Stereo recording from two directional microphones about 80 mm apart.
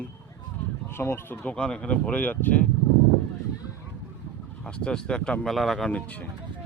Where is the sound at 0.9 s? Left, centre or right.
Left.